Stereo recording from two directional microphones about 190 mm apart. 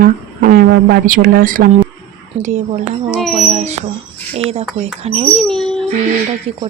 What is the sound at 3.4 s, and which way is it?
A woman's voice, 35° right (ahead or behind).